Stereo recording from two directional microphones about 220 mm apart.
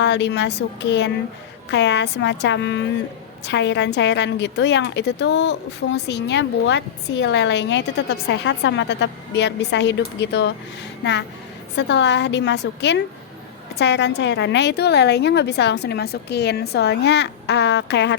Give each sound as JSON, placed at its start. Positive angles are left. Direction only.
{"t": 0.0, "sound": "a woman's voice", "side_deg": 50}
{"t": 11.8, "sound": "a woman's voice", "side_deg": 50}